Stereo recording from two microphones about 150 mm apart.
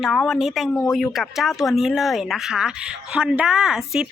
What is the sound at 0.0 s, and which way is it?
Speech, centre (ahead or behind).